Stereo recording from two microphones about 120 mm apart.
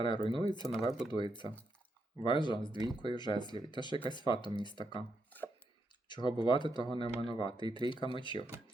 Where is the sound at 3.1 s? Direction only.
40° left (ahead or behind).